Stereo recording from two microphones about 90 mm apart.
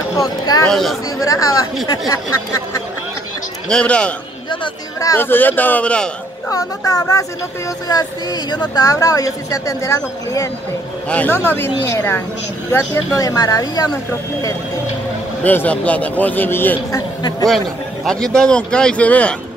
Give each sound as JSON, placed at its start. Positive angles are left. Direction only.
{"t": 0.2, "sound": "speech", "side_deg": 45}
{"t": 0.7, "sound": "speech", "side_deg": 5}
{"t": 1.2, "sound": "speech", "side_deg": 40}
{"t": 3.6, "sound": "speech", "side_deg": 10}
{"t": 5.0, "sound": "a man's voice", "side_deg": 25}
{"t": 6.5, "sound": "speech", "side_deg": 40}
{"t": 11.1, "sound": "a man's voice", "side_deg": 15}
{"t": 13.2, "sound": "speech", "side_deg": 40}
{"t": 15.4, "sound": "a man's voice", "side_deg": 20}
{"t": 18.0, "sound": "speech", "side_deg": 5}